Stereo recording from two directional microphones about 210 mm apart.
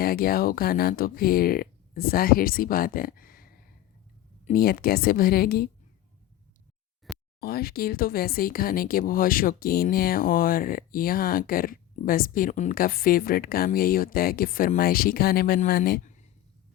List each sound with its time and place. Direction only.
0.0 s speech: 45° left (ahead or behind)
7.3 s speech: 45° left (ahead or behind)